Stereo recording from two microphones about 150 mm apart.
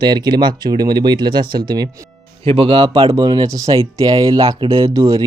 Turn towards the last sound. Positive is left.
turn(degrees=-20)  # may be behind; listen again after turning